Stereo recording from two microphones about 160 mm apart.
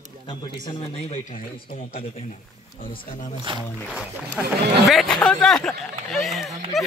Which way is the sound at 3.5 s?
30° right (ahead or behind).